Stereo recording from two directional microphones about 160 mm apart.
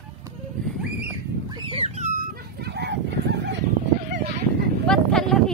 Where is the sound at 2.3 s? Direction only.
90° right.